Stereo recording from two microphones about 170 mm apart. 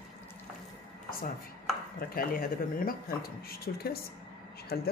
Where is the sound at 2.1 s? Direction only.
60° left (ahead or behind).